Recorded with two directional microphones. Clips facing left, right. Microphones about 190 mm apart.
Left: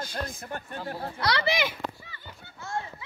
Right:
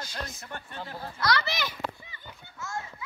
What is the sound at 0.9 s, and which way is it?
Speech, 30° left (ahead or behind).